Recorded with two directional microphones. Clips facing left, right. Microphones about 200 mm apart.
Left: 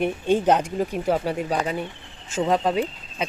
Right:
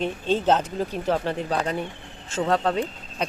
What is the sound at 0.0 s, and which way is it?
Speech, 15° left (ahead or behind).